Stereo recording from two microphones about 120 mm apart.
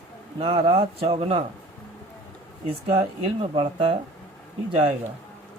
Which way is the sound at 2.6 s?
55° right (ahead or behind).